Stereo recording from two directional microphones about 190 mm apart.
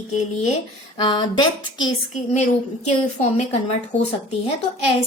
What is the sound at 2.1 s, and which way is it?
Speech, 35° left (ahead or behind).